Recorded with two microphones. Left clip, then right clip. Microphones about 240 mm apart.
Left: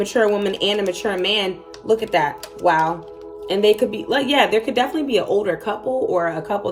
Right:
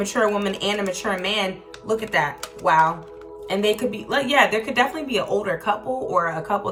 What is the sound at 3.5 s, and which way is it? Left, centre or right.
Speech, centre.